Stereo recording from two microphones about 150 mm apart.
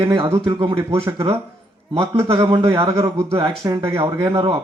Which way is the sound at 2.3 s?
25° right (ahead or behind).